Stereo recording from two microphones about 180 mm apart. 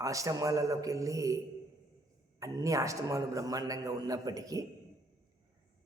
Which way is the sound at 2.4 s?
20° right (ahead or behind).